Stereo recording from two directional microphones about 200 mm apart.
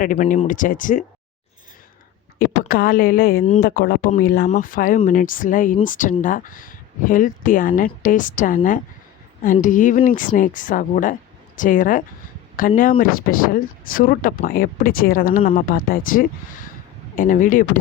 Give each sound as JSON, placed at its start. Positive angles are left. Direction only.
{"t": 0.0, "sound": "speech", "side_deg": 40}
{"t": 2.6, "sound": "speech", "side_deg": 45}